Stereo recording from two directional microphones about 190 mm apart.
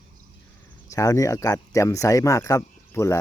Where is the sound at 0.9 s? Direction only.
15° left (ahead or behind).